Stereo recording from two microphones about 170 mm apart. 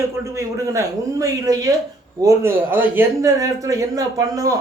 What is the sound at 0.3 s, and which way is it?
A man's voice, 20° right (ahead or behind).